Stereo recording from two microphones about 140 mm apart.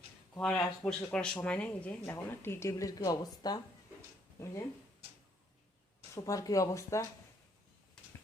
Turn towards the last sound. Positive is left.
turn(degrees=20)  # may be behind; listen again after turning